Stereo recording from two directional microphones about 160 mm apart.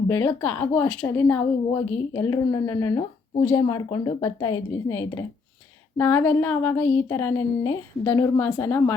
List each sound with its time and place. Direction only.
0.1 s a woman's voice: 20° left (ahead or behind)